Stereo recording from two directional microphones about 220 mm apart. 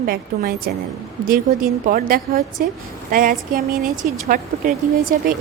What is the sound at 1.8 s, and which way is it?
A woman's voice, 40° right (ahead or behind).